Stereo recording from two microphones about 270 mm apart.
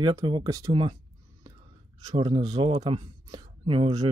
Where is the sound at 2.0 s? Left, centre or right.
Centre.